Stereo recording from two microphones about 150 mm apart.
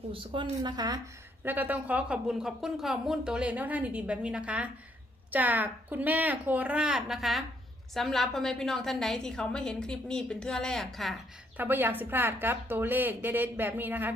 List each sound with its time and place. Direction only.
0.1 s speech: 35° right (ahead or behind)
1.5 s a woman's voice: 10° right (ahead or behind)
11.5 s speech: 15° right (ahead or behind)